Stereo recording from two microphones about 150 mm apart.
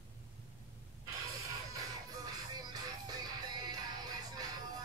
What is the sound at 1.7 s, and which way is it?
Music, 25° right (ahead or behind).